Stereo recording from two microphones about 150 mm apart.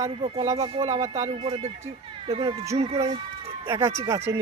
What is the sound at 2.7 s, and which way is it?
Speech, 45° right (ahead or behind).